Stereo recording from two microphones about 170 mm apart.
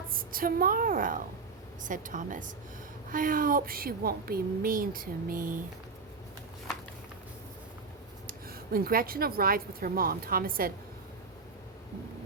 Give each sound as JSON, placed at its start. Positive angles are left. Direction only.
{"t": 0.1, "sound": "speech", "side_deg": -55}
{"t": 8.3, "sound": "speech", "side_deg": -60}